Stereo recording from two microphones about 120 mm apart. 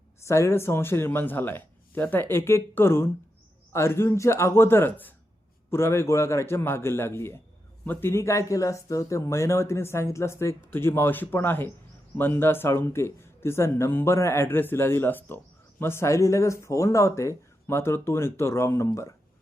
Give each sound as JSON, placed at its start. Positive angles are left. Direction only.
{"t": 0.3, "sound": "speech", "side_deg": 25}